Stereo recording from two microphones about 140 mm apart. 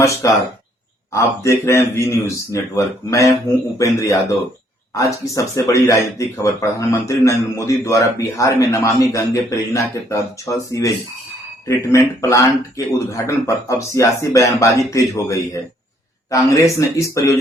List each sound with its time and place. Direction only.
0.0 s speech: 25° left (ahead or behind)